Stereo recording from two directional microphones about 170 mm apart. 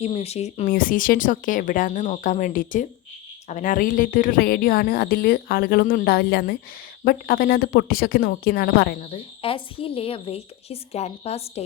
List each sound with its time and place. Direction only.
0.0 s a woman's voice: 35° left (ahead or behind)
0.7 s a woman's voice: 55° left (ahead or behind)
9.0 s a woman's voice: 35° left (ahead or behind)